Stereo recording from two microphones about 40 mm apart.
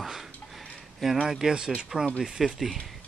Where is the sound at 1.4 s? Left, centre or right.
Centre.